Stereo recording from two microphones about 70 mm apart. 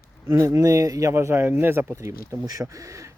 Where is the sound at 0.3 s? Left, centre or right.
Right.